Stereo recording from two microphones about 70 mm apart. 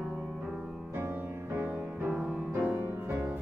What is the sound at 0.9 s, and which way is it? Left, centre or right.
Music, right.